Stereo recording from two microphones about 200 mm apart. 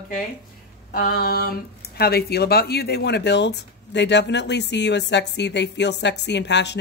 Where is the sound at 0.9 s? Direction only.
50° left (ahead or behind).